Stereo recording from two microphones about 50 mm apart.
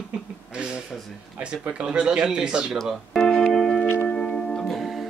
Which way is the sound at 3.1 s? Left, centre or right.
Centre.